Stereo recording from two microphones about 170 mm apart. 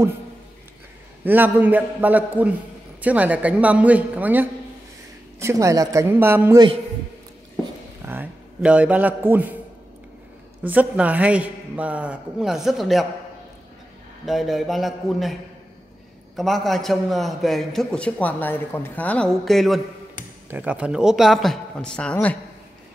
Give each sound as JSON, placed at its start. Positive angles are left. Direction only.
{"t": 1.2, "sound": "a man's voice", "side_deg": -10}
{"t": 8.0, "sound": "a man's voice", "side_deg": -10}
{"t": 10.7, "sound": "a man's voice", "side_deg": -10}
{"t": 14.2, "sound": "a man's voice", "side_deg": 0}
{"t": 16.3, "sound": "a man's voice", "side_deg": 0}